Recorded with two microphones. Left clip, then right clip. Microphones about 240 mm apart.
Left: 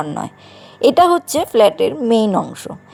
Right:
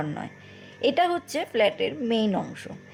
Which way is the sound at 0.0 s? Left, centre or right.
Left.